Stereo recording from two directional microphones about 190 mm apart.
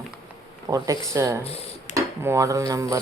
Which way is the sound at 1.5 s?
30° left (ahead or behind).